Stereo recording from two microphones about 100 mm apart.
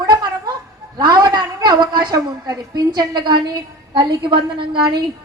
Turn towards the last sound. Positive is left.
turn(degrees=-55)  # may be behind; listen again after turning